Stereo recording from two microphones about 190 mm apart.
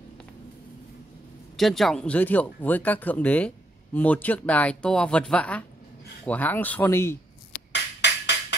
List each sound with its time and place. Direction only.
1.6 s speech: centre (ahead or behind)
7.7 s music: 65° left (ahead or behind)